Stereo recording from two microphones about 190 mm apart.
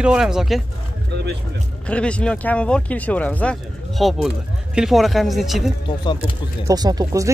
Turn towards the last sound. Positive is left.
turn(degrees=-20)  # may be behind; listen again after turning